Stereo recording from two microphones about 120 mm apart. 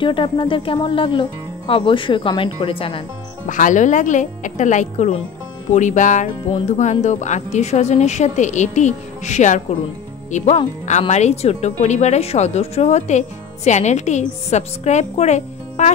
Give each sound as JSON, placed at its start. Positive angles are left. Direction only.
{"t": 0.0, "sound": "speech", "side_deg": 45}
{"t": 3.4, "sound": "speech", "side_deg": 90}
{"t": 6.8, "sound": "speech", "side_deg": 80}
{"t": 10.3, "sound": "speech", "side_deg": 65}